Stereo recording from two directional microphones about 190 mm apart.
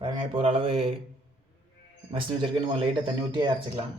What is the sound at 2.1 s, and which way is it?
A man's voice, 30° right (ahead or behind).